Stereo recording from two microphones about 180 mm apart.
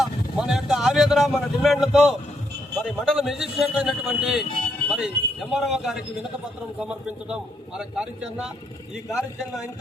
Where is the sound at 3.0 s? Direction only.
Centre (ahead or behind).